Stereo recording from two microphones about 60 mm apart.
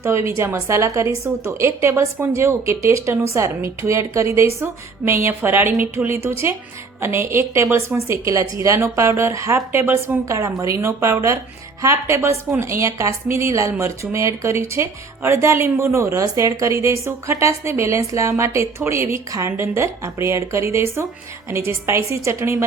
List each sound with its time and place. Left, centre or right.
0.0 s a woman's voice: right
4.6 s a woman's voice: right
10.2 s a woman's voice: right